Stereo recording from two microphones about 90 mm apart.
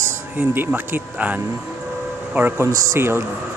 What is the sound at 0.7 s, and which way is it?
Speech, 20° right (ahead or behind).